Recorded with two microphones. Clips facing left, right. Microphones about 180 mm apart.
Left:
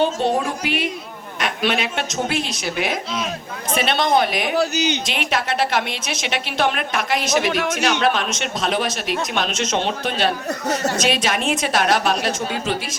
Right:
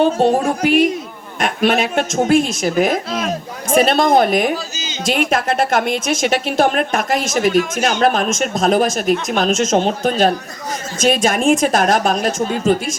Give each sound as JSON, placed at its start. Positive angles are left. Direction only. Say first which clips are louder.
{"t": 0.2, "sound": "a woman's voice", "louder": "right 6 dB", "side_deg": -45}
{"t": 4.5, "sound": "speech", "louder": "left 7 dB", "side_deg": 65}
{"t": 5.0, "sound": "a woman's voice", "louder": "right 6 dB", "side_deg": -45}